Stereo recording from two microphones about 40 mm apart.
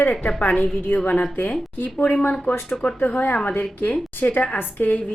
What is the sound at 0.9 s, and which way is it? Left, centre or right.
Speech, left.